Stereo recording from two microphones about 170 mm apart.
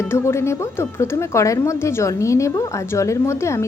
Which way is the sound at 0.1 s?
15° left (ahead or behind).